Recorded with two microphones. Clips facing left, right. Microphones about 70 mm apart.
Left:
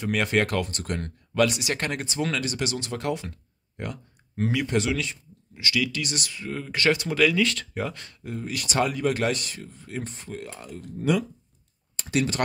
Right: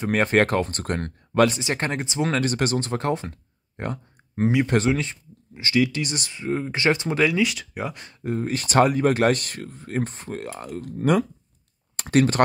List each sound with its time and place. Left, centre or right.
0.0 s speech: right
2.3 s speech: right
7.4 s speech: centre
8.2 s speech: right